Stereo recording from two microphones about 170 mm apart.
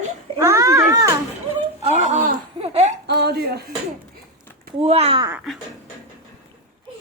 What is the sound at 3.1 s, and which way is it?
Dishes, 75° right (ahead or behind).